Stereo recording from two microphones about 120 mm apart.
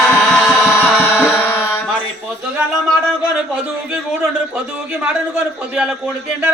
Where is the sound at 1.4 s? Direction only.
20° left (ahead or behind).